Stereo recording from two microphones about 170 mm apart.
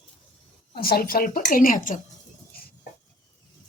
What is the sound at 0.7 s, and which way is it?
A woman's voice, 65° left (ahead or behind).